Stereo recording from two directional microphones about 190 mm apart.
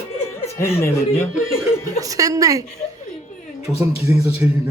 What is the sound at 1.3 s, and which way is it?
Speech, centre (ahead or behind).